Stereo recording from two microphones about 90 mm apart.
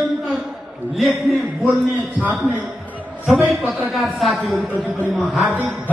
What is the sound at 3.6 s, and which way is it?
A man's voice, centre (ahead or behind).